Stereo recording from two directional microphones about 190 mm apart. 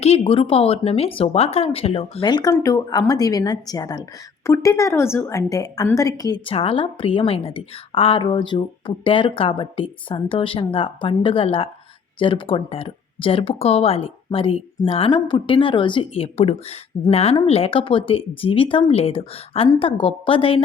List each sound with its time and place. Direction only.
0.0 s speech: 30° left (ahead or behind)